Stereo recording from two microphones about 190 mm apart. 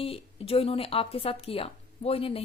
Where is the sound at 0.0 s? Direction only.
30° left (ahead or behind).